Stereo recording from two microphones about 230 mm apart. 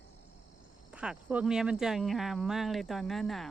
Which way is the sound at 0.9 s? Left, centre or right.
Centre.